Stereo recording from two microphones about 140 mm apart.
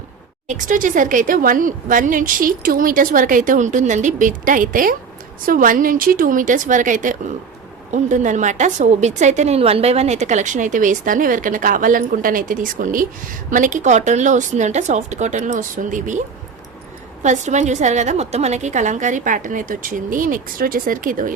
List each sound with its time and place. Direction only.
0.4 s a woman's voice: 65° right (ahead or behind)
17.2 s a woman's voice: 55° right (ahead or behind); by 21.3 s 75° right (ahead or behind)